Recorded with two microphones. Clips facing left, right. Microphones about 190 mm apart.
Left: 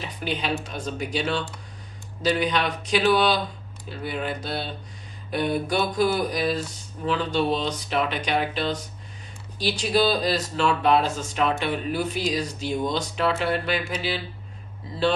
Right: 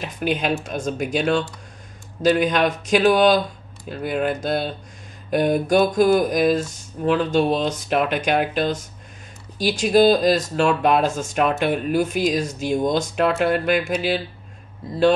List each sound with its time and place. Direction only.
0.0 s speech: 50° right (ahead or behind)
4.0 s speech: 50° right (ahead or behind)